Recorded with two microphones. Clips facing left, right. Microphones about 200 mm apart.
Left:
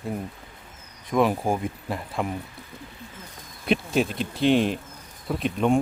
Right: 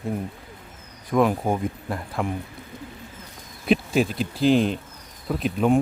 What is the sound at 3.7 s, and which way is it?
Speech, centre (ahead or behind).